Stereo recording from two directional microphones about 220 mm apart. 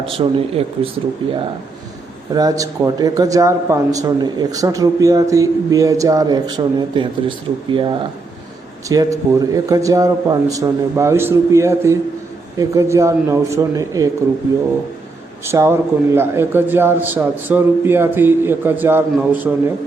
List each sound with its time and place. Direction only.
0.0 s speech: 25° right (ahead or behind)
2.3 s a man's voice: 15° right (ahead or behind)
15.4 s a man's voice: 10° right (ahead or behind)